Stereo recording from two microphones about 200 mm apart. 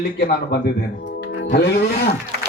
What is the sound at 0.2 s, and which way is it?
Speech, 50° left (ahead or behind).